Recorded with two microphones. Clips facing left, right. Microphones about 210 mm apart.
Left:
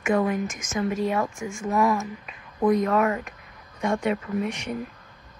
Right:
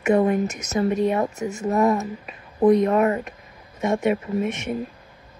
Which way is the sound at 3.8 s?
25° right (ahead or behind).